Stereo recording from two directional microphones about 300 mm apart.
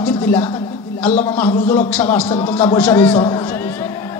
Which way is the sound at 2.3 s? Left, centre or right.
Centre.